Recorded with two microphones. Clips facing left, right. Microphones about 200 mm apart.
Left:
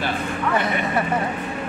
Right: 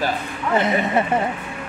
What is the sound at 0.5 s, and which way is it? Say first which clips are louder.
Speech: right 5 dB; 25° right (ahead or behind).